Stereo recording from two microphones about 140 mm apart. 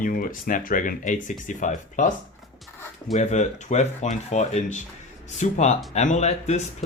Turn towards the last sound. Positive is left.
turn(degrees=55)  # may be behind; listen again after turning